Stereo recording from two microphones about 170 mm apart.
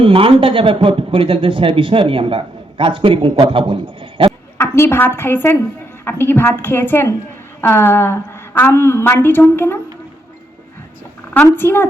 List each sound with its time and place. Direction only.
0.0 s a man's voice: 30° right (ahead or behind)
4.5 s a woman's voice: 15° left (ahead or behind)
11.3 s a woman's voice: 10° left (ahead or behind)